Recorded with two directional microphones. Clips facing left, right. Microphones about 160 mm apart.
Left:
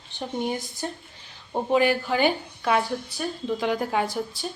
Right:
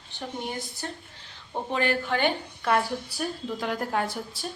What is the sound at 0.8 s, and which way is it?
Speech, 15° left (ahead or behind).